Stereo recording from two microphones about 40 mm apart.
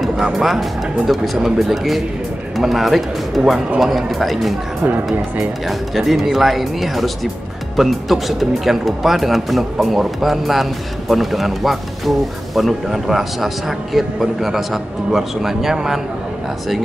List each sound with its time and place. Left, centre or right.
0.3 s speech: centre
5.7 s speech: centre